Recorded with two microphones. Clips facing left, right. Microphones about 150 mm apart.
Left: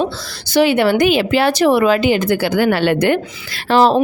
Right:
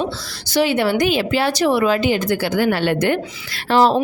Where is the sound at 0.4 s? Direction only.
60° left (ahead or behind).